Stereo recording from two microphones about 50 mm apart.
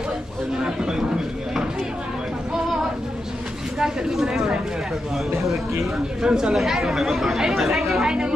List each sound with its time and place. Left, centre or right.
0.6 s a sound: centre
3.8 s speech: centre
5.3 s speech: right
6.2 s speech: centre